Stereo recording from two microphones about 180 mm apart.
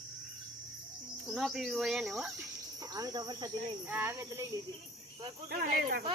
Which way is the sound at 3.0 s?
20° right (ahead or behind).